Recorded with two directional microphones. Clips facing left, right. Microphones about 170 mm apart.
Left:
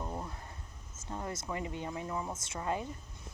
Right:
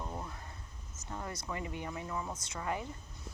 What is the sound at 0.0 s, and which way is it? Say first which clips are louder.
Air conditioning: left 2 dB; 10° left (ahead or behind).